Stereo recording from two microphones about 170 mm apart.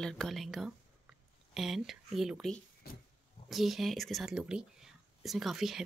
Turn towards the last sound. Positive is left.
turn(degrees=0)  # may be behind; listen again after turning